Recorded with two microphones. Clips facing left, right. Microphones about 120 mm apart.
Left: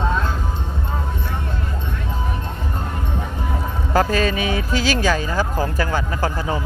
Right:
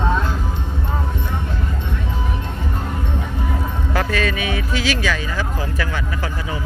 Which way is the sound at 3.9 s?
35° left (ahead or behind).